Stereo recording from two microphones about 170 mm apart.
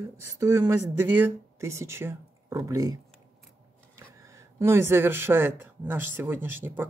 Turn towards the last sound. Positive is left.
turn(degrees=-15)  # may be behind; listen again after turning